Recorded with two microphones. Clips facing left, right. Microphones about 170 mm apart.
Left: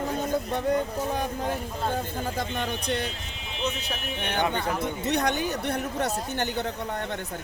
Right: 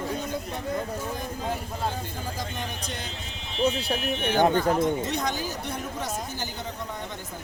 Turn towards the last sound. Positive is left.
turn(degrees=65)  # may be behind; listen again after turning